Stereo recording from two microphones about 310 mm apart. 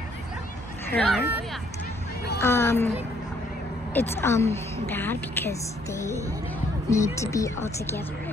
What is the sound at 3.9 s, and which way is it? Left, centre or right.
Speech, centre.